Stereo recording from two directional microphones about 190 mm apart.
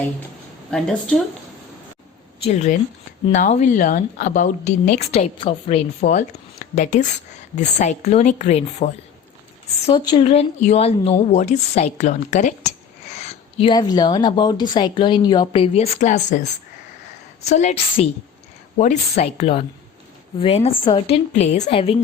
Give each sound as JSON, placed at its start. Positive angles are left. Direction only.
{"t": 0.7, "sound": "a woman's voice", "side_deg": 5}
{"t": 2.4, "sound": "a woman's voice", "side_deg": 35}
{"t": 9.8, "sound": "a woman's voice", "side_deg": 25}